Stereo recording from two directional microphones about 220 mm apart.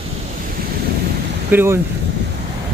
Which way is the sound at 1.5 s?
10° right (ahead or behind).